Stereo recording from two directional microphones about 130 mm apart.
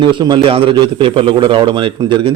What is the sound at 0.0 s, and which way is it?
A man's voice, 35° right (ahead or behind).